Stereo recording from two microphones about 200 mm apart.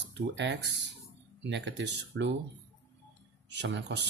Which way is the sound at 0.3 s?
60° right (ahead or behind).